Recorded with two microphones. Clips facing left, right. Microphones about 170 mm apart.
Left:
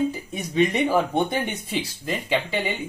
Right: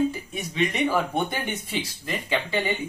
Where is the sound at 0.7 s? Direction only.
15° left (ahead or behind).